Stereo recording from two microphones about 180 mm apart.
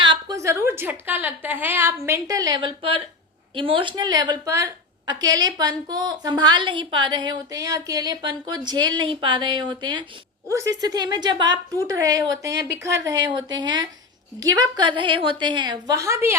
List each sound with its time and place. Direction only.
0.0 s a woman's voice: 25° right (ahead or behind)